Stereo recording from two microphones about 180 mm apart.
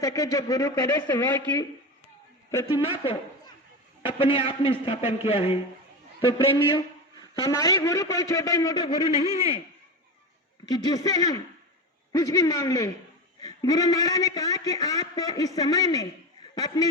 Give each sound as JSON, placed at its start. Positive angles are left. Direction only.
{"t": 0.0, "sound": "speech", "side_deg": 20}
{"t": 2.8, "sound": "a man's voice", "side_deg": 30}
{"t": 9.0, "sound": "a man's voice", "side_deg": -20}
{"t": 10.7, "sound": "a man's voice", "side_deg": 20}